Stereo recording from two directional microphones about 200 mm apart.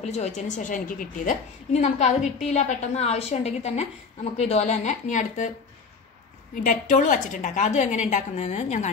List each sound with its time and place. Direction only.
0.0 s a woman's voice: 35° left (ahead or behind)
6.5 s a woman's voice: 40° left (ahead or behind)